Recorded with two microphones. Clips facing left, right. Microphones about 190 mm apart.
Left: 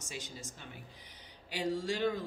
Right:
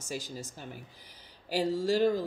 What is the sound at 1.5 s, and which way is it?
Speech, 40° right (ahead or behind).